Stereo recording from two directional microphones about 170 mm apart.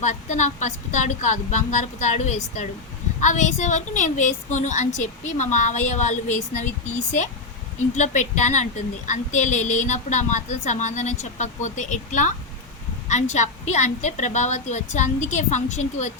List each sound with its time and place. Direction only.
0.0 s a woman's voice: 45° left (ahead or behind)